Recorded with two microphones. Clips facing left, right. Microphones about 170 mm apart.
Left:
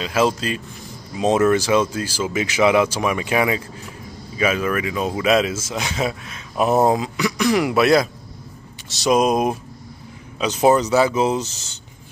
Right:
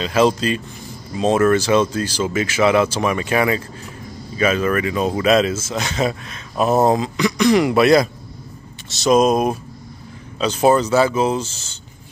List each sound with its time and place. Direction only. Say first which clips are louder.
0.0 s speech: right 3 dB; 5° left (ahead or behind)
1.1 s speech: right 1 dB; 15° left (ahead or behind)